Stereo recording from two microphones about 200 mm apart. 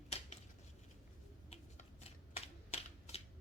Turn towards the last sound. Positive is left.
turn(degrees=30)  # may be behind; listen again after turning